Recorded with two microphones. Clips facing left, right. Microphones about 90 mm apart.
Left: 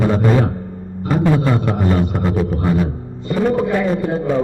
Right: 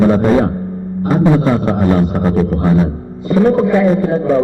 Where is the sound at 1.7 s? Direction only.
5° right (ahead or behind).